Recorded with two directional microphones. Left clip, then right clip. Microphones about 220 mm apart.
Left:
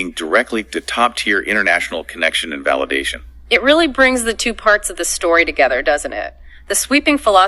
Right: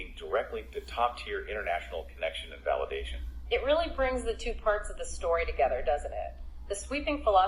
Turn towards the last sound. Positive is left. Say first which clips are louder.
# left 14 dB
turn(degrees=55)  # may be behind; listen again after turning